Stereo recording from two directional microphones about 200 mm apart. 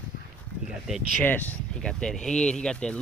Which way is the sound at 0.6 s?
Centre (ahead or behind).